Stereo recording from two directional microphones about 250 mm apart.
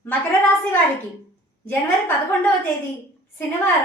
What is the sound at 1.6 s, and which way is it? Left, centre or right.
Speech, centre.